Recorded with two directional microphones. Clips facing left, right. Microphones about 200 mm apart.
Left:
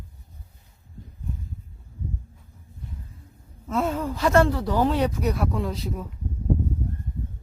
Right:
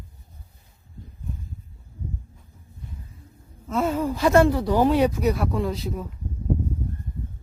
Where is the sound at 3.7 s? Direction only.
5° right (ahead or behind).